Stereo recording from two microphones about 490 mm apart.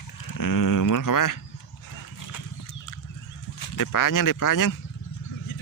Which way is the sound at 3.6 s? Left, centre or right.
Left.